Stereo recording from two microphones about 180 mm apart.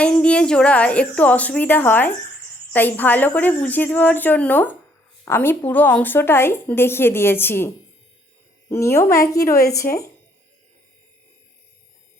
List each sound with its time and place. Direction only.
0.0 s a woman's voice: 5° left (ahead or behind)
8.7 s a woman's voice: 15° left (ahead or behind)